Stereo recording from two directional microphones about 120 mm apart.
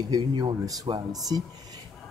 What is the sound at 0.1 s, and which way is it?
Speech, 35° right (ahead or behind).